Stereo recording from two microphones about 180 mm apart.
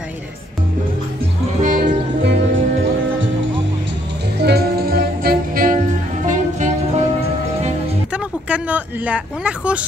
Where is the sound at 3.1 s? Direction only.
90° right.